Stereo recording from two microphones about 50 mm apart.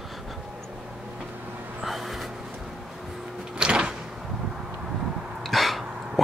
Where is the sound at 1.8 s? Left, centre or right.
Centre.